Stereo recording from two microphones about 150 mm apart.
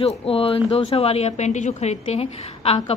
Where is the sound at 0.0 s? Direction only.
40° left (ahead or behind).